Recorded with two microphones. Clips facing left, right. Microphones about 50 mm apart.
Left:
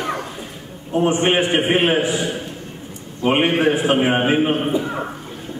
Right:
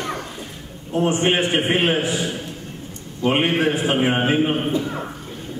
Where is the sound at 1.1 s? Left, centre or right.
Centre.